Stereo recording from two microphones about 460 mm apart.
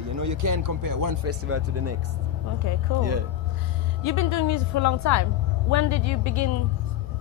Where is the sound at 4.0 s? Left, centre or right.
Left.